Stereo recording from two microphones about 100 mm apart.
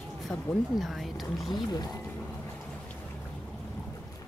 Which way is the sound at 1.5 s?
40° left (ahead or behind).